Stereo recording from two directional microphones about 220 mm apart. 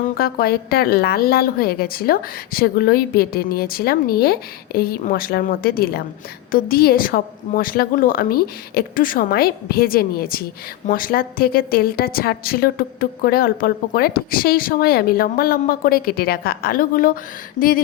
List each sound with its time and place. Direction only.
0.0 s a woman's voice: 45° left (ahead or behind)